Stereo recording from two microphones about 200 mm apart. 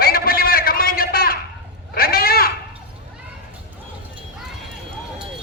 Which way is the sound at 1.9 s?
50° left (ahead or behind).